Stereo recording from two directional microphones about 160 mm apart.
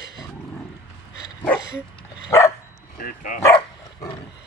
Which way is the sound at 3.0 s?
60° left (ahead or behind).